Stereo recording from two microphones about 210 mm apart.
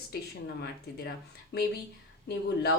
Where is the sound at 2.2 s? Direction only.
50° left (ahead or behind).